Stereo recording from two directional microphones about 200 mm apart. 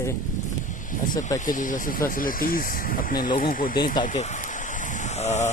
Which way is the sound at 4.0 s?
35° left (ahead or behind).